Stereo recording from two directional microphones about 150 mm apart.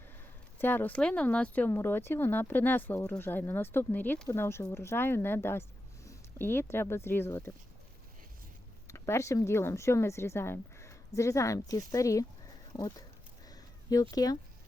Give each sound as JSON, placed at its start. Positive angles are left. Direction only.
{"t": 0.6, "sound": "speech", "side_deg": 15}
{"t": 8.9, "sound": "speech", "side_deg": 20}
{"t": 13.5, "sound": "a sound", "side_deg": 25}